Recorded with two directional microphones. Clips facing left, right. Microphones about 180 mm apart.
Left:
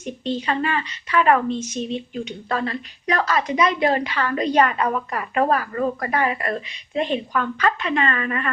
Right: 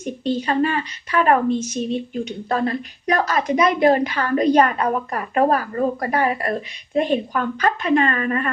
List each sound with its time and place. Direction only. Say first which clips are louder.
0.3 s a woman's voice: right 3 dB; 40° right (ahead or behind)